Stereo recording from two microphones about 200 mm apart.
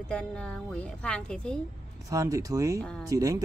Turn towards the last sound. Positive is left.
turn(degrees=-15)  # may be behind; listen again after turning